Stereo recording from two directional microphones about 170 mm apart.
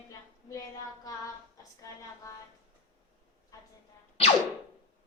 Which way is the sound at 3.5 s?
20° left (ahead or behind).